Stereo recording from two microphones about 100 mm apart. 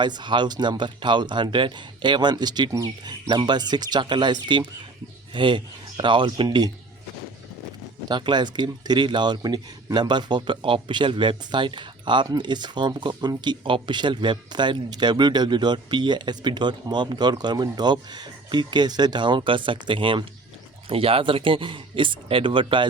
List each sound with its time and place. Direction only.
0.0 s speech: 50° right (ahead or behind)
8.0 s speech: 50° right (ahead or behind)
20.9 s speech: 65° right (ahead or behind)